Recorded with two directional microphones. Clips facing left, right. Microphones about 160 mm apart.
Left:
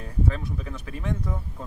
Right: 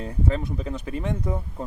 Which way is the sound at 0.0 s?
20° right (ahead or behind).